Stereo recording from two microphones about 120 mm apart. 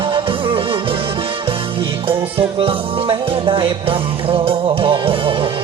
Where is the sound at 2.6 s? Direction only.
50° right (ahead or behind).